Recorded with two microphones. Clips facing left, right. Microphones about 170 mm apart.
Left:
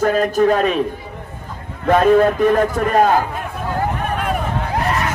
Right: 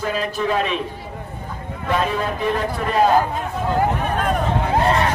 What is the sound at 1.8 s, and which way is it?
A man's voice, 50° left (ahead or behind).